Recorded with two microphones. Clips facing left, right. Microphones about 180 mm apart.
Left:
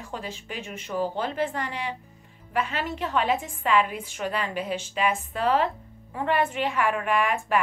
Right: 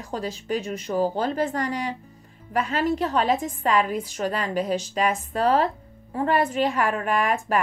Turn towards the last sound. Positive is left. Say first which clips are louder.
# right 1 dB
turn(degrees=-40)  # may be behind; listen again after turning